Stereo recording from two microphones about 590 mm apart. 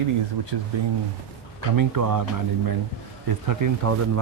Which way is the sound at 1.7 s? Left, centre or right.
Right.